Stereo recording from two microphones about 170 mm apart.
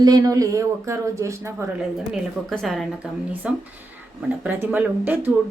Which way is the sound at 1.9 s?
Centre (ahead or behind).